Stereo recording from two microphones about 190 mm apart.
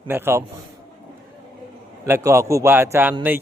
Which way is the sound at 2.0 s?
15° right (ahead or behind).